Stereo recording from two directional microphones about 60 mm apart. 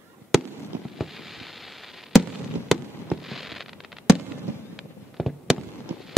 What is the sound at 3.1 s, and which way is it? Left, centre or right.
Fireworks, centre.